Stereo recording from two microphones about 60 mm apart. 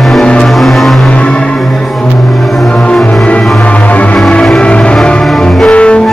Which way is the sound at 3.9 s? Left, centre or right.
Left.